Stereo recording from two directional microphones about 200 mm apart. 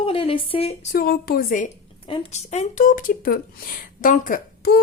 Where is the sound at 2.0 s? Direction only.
25° left (ahead or behind).